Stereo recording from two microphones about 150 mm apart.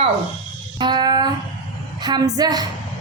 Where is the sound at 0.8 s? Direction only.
30° right (ahead or behind).